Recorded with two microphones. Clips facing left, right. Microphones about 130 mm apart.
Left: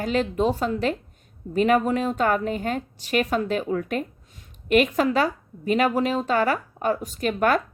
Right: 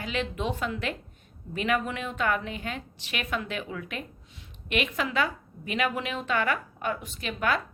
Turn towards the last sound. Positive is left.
turn(degrees=45)  # may be behind; listen again after turning